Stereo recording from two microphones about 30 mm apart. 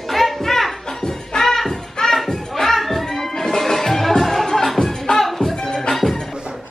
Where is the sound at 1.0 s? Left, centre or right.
Left.